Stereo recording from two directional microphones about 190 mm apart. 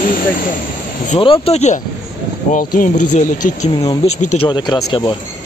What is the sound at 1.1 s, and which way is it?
Speech, 30° left (ahead or behind).